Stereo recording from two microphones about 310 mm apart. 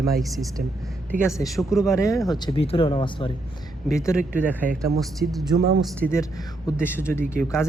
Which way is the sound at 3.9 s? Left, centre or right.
Centre.